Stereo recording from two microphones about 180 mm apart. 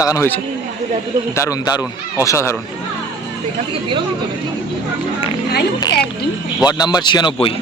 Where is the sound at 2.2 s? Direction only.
15° left (ahead or behind).